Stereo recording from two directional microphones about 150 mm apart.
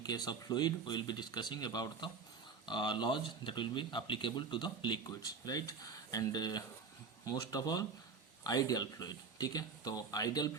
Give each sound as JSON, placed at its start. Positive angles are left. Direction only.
{"t": 0.0, "sound": "speech", "side_deg": 25}